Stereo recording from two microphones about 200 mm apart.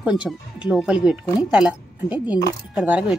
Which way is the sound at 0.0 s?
5° right (ahead or behind).